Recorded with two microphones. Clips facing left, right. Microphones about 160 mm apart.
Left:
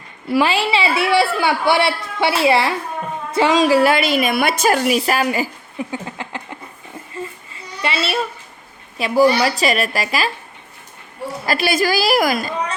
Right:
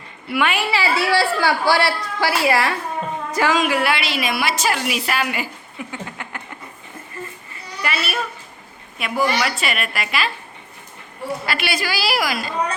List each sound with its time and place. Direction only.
0.3 s a woman's voice: 30° left (ahead or behind)
5.9 s a sound: 30° left (ahead or behind)
7.2 s babbling: 25° left (ahead or behind)
9.0 s a woman's voice: 35° left (ahead or behind)
11.4 s a woman's voice: 40° left (ahead or behind)